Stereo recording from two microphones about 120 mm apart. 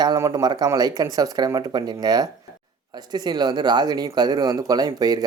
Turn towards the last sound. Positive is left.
turn(degrees=-35)  # may be behind; listen again after turning